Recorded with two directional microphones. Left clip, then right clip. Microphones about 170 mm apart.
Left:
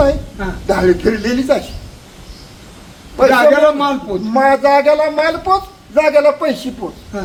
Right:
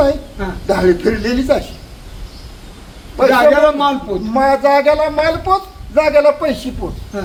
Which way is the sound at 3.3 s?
5° right (ahead or behind).